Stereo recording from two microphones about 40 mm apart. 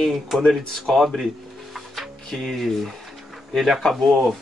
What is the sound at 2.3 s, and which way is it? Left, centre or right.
Speech, centre.